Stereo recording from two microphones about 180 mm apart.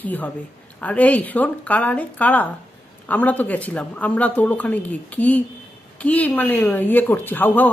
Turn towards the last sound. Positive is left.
turn(degrees=10)  # may be behind; listen again after turning